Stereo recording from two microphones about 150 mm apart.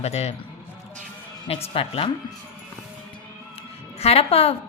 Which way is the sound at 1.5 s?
40° left (ahead or behind).